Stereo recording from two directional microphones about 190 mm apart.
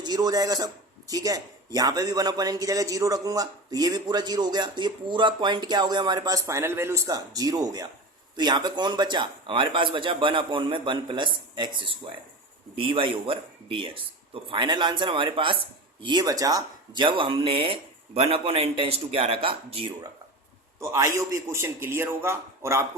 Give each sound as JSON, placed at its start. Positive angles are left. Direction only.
{"t": 0.0, "sound": "a man's voice", "side_deg": -20}
{"t": 20.9, "sound": "a man's voice", "side_deg": -15}